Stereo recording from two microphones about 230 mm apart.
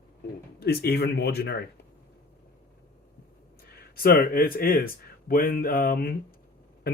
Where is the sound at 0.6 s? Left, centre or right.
Left.